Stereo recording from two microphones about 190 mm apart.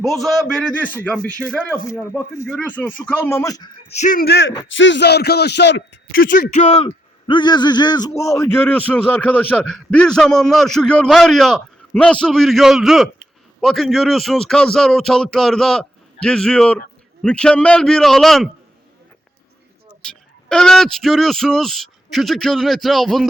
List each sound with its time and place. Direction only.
0.0 s a man's voice: centre (ahead or behind); by 3.7 s 20° left (ahead or behind)
3.8 s speech: 40° left (ahead or behind); by 4.5 s 60° left (ahead or behind)
4.7 s a man's voice: 75° left (ahead or behind)
6.3 s a man's voice: 45° left (ahead or behind); by 18.5 s centre (ahead or behind)
20.0 s speech: 5° left (ahead or behind)